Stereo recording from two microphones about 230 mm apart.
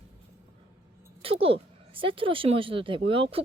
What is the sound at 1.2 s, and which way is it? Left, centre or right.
Speech, right.